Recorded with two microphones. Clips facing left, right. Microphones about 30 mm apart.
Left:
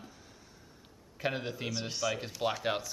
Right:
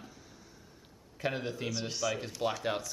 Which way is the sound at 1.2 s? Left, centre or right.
Centre.